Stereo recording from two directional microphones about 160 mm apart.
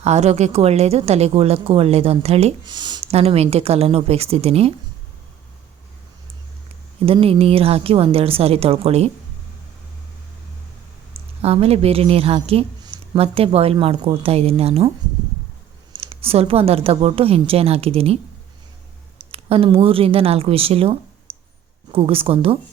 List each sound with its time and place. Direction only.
0.0 s a woman's voice: 45° right (ahead or behind)
2.6 s speech: 25° right (ahead or behind)
3.1 s a woman's voice: 40° right (ahead or behind)
7.0 s a woman's voice: 35° right (ahead or behind)
11.4 s a woman's voice: 40° right (ahead or behind)
15.9 s a woman's voice: 35° right (ahead or behind)
19.3 s a woman's voice: 35° right (ahead or behind)
21.3 s a sound: 35° right (ahead or behind)
21.9 s a woman's voice: 35° right (ahead or behind)